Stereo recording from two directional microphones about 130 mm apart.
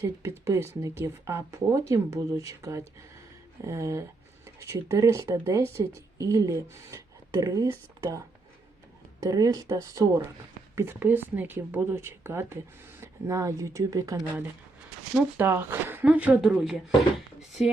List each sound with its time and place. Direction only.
0.0 s speech: 20° right (ahead or behind)
9.2 s speech: 25° right (ahead or behind)
10.8 s speech: 15° right (ahead or behind)
15.4 s speech: 15° right (ahead or behind)